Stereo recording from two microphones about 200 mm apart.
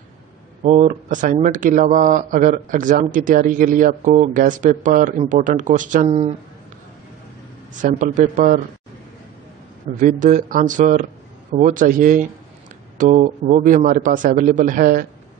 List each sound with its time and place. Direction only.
0.7 s speech: 40° right (ahead or behind)
7.7 s speech: 40° right (ahead or behind)
9.8 s speech: 40° right (ahead or behind)